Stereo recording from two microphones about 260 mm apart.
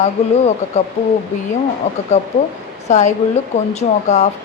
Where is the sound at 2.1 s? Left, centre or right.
Left.